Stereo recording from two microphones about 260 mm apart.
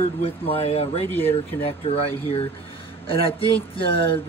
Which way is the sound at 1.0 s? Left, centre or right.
Centre.